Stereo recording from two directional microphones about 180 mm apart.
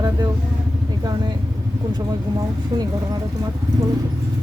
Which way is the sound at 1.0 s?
25° right (ahead or behind).